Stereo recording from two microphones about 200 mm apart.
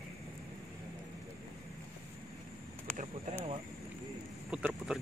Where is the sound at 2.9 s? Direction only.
5° left (ahead or behind).